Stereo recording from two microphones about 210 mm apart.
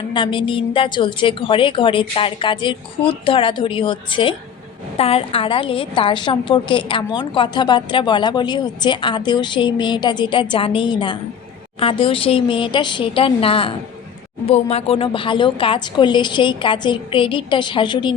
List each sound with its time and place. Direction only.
0.1 s a woman's voice: 25° left (ahead or behind)